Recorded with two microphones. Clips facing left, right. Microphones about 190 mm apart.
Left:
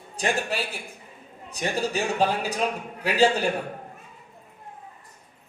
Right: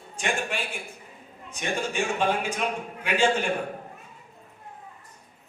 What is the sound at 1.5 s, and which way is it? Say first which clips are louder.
A man's voice: left 3 dB; 35° left (ahead or behind).